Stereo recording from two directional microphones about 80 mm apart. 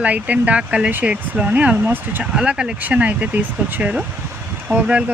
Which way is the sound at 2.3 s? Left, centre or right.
Centre.